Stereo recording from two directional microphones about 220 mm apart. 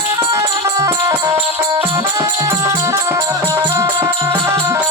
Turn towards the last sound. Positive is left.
turn(degrees=-10)  # may be behind; listen again after turning